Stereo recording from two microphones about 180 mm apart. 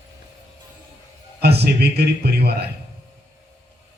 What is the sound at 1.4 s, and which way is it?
A man's voice, 65° right (ahead or behind).